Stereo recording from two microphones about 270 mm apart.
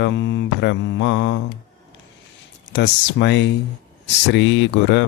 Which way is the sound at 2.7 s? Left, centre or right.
Left.